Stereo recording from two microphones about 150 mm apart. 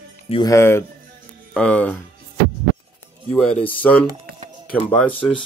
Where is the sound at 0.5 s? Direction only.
15° left (ahead or behind).